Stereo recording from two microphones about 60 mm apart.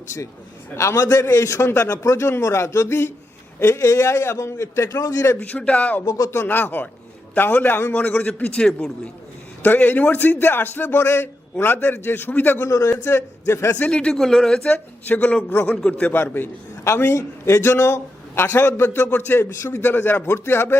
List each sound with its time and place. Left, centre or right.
0.8 s a man's voice: left
5.4 s speech: left
6.1 s speech: left
6.3 s a man's voice: left
9.6 s a man's voice: left
11.5 s a man's voice: left
12.5 s a man's voice: left
13.7 s speech: left
14.7 s speech: left
16.1 s a man's voice: left
17.2 s a man's voice: left